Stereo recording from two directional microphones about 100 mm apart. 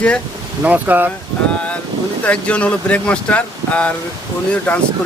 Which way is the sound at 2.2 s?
10° left (ahead or behind).